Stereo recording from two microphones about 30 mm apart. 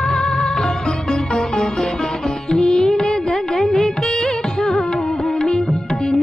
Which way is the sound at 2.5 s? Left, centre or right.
Left.